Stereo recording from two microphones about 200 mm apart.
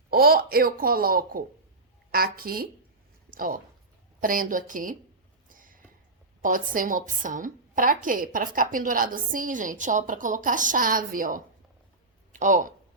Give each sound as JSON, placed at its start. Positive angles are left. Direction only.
{"t": 0.1, "sound": "a woman's voice", "side_deg": -50}
{"t": 5.5, "sound": "a sound", "side_deg": -40}
{"t": 6.4, "sound": "a woman's voice", "side_deg": -40}